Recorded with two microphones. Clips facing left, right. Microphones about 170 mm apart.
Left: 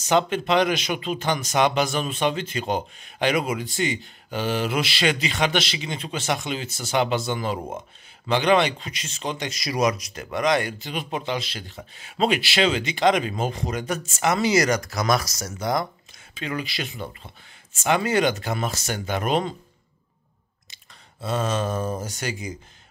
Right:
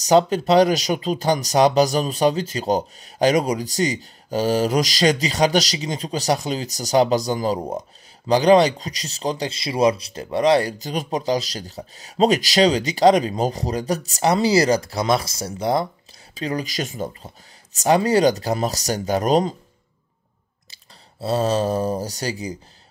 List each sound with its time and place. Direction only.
0.0 s speech: 40° right (ahead or behind)
20.7 s speech: 35° right (ahead or behind)